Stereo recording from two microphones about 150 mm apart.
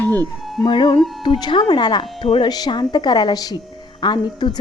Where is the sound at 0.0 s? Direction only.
10° left (ahead or behind).